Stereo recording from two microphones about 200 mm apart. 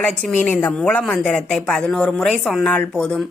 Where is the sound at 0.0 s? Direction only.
5° left (ahead or behind).